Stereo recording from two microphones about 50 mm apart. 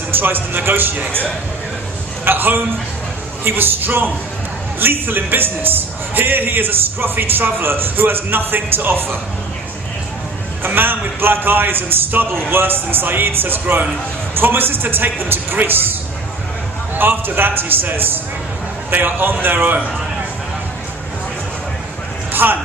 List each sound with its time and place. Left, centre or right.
0.1 s a man's voice: right
2.2 s a man's voice: right
10.6 s a man's voice: right
17.0 s a man's voice: right
22.3 s a sound: right